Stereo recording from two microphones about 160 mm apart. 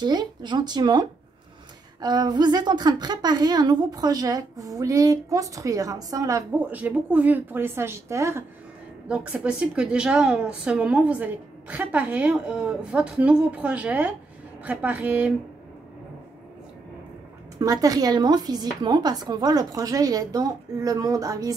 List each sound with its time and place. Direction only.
0.0 s a woman's voice: 25° right (ahead or behind)
6.7 s a woman's voice: 10° right (ahead or behind)
17.6 s a woman's voice: 20° right (ahead or behind)